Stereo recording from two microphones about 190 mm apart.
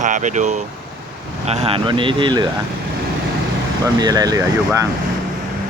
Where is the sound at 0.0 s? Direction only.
40° right (ahead or behind); by 2.5 s 25° right (ahead or behind).